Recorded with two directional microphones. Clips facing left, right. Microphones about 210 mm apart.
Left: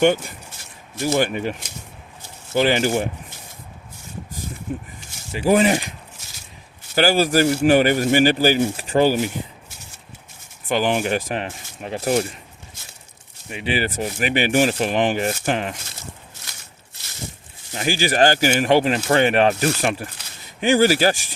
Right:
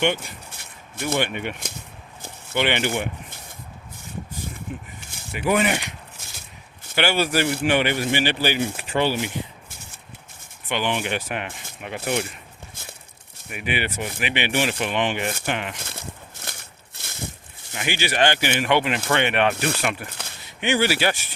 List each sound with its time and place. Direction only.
1.0 s speech: 35° left (ahead or behind)
2.6 s speech: 35° left (ahead or behind)
5.3 s speech: 30° left (ahead or behind)
6.9 s speech: 35° left (ahead or behind)
10.7 s speech: 40° left (ahead or behind)
13.5 s speech: 30° left (ahead or behind)
15.8 s a sound: 55° right (ahead or behind)
17.7 s speech: 35° left (ahead or behind)